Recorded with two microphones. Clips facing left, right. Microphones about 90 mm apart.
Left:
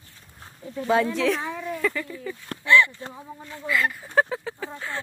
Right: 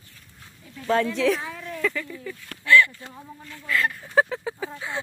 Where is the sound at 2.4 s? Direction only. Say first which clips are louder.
Right 1 dB; 25° left (ahead or behind).